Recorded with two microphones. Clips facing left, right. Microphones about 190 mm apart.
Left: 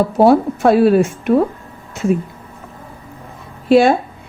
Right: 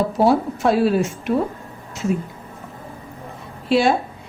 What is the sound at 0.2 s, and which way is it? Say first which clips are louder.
Speech: left 6 dB; 60° left (ahead or behind).